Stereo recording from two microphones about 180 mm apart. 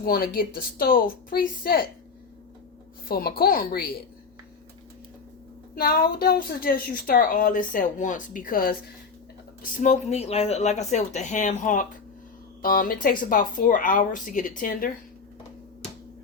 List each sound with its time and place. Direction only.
0.0 s speech: 55° left (ahead or behind)
3.1 s a woman's voice: 55° left (ahead or behind)
5.7 s speech: 55° left (ahead or behind)
9.7 s speech: 40° left (ahead or behind)